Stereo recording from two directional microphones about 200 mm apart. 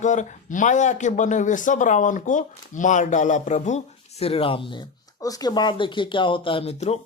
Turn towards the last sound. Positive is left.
turn(degrees=30)  # may be behind; listen again after turning